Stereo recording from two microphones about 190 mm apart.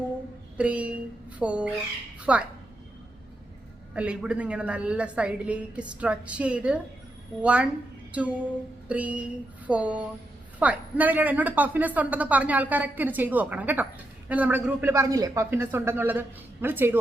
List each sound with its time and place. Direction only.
0.5 s a sound: 5° right (ahead or behind)
2.3 s a woman's voice: 5° right (ahead or behind)
3.9 s a woman's voice: 5° right (ahead or behind)